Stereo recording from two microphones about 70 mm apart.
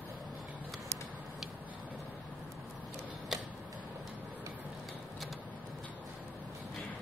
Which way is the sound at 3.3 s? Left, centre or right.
Centre.